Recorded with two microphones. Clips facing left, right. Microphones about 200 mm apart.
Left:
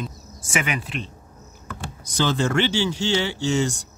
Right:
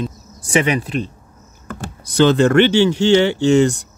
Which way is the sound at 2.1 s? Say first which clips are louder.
Right 10 dB; 65° right (ahead or behind).